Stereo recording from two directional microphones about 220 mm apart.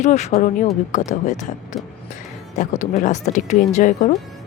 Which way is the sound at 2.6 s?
35° left (ahead or behind).